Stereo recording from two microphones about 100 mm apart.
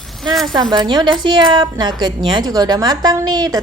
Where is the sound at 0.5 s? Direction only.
45° right (ahead or behind).